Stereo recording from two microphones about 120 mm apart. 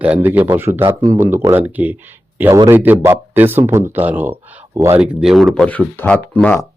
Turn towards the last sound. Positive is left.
turn(degrees=15)  # may be behind; listen again after turning